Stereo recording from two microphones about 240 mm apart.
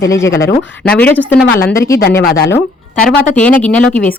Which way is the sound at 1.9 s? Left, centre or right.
Left.